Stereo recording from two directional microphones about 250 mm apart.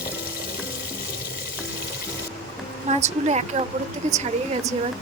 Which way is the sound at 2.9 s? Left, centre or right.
Right.